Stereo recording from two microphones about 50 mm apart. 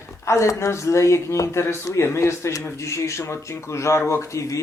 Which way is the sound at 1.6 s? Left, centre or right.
Left.